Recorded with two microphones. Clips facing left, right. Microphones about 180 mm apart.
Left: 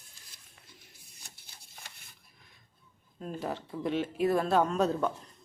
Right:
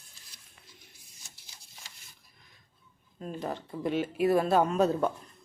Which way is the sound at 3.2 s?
Centre (ahead or behind).